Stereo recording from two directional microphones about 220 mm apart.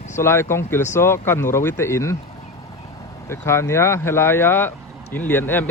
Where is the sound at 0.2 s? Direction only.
10° left (ahead or behind).